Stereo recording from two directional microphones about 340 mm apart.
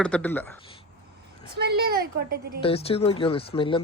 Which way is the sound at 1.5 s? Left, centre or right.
Right.